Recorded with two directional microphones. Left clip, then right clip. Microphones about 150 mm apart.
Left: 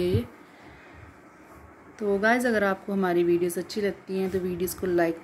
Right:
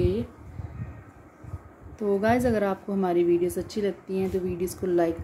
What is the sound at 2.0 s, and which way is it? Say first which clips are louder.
A woman's voice: even; 20° right (ahead or behind).